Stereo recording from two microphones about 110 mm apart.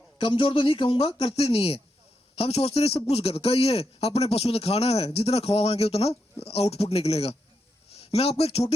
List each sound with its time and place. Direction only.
0.2 s a man's voice: 50° left (ahead or behind); by 8.7 s 65° left (ahead or behind)